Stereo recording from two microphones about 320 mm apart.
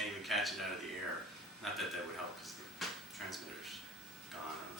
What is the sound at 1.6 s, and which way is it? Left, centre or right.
Speech, centre.